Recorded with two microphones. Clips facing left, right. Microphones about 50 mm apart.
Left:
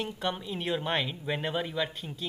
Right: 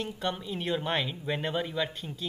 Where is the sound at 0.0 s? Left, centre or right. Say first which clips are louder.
Even; centre.